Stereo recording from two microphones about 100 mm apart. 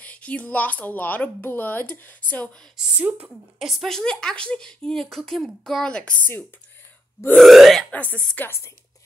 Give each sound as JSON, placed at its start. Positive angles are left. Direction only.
{"t": 0.0, "sound": "a woman's voice", "side_deg": 15}
{"t": 3.0, "sound": "a woman's voice", "side_deg": -15}
{"t": 3.5, "sound": "a woman's voice", "side_deg": 0}
{"t": 7.3, "sound": "a sound", "side_deg": 0}
{"t": 7.9, "sound": "a woman's voice", "side_deg": 15}